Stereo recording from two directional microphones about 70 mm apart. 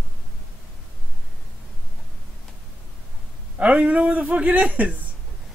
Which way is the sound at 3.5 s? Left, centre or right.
Centre.